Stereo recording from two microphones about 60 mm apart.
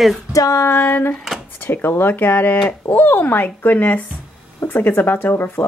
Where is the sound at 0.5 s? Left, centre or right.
Left.